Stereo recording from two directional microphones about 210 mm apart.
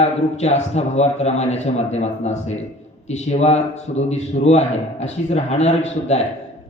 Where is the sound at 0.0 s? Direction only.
30° left (ahead or behind).